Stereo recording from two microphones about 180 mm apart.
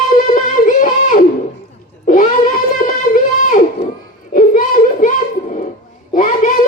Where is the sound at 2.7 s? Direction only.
50° left (ahead or behind).